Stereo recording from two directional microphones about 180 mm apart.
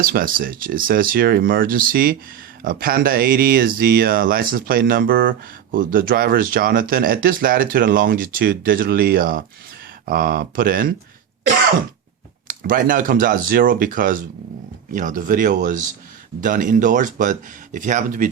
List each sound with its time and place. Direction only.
0.0 s speech: 50° right (ahead or behind)
12.5 s speech: 50° right (ahead or behind)